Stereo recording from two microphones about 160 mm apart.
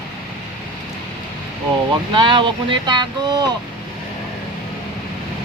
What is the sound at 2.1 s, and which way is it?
Speech, 30° right (ahead or behind).